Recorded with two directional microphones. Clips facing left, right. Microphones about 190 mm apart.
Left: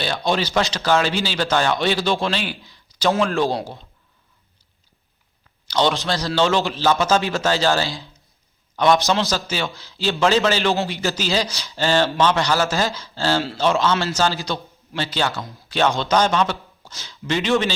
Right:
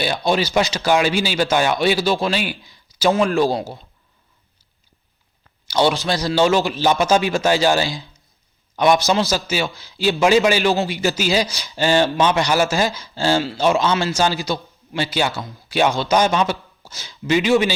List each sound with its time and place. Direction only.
0.0 s a man's voice: 10° right (ahead or behind)
5.6 s a man's voice: 10° right (ahead or behind)
8.7 s a sound: 15° right (ahead or behind)
9.1 s a man's voice: 5° right (ahead or behind)